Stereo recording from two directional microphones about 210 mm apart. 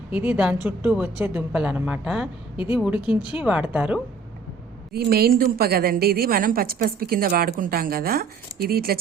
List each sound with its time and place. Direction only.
0.1 s a woman's voice: 10° right (ahead or behind)
3.0 s speech: 20° left (ahead or behind)
3.4 s speech: 5° right (ahead or behind)
4.9 s a woman's voice: 45° right (ahead or behind)